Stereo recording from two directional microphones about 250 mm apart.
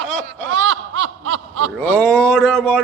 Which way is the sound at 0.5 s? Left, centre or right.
Right.